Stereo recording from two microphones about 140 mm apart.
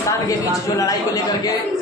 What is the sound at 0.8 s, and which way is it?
Speech, 25° left (ahead or behind).